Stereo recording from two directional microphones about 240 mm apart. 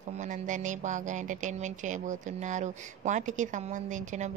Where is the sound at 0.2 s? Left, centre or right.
Right.